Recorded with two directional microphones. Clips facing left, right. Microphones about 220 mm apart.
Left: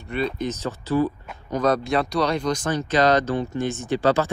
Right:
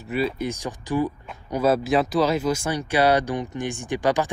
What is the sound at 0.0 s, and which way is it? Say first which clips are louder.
Speech: right 1 dB; 5° right (ahead or behind).